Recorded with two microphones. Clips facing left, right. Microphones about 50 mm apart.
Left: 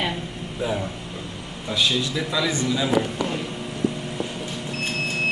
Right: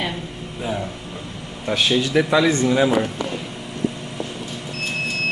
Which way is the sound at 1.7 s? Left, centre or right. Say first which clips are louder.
Right 4 dB; right.